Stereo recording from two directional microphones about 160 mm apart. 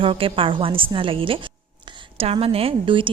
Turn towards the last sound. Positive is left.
turn(degrees=-30)  # may be behind; listen again after turning